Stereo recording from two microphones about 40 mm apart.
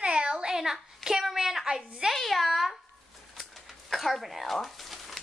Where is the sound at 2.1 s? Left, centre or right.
Centre.